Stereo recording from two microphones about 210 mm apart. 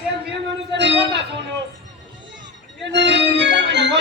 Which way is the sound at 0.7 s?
55° right (ahead or behind).